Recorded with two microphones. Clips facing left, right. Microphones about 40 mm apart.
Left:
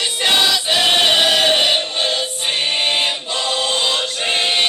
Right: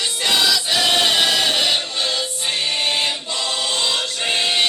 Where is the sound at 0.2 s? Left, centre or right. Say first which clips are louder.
Left 2 dB; left.